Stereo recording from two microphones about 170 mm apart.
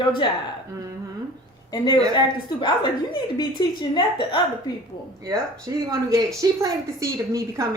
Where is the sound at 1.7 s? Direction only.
25° left (ahead or behind).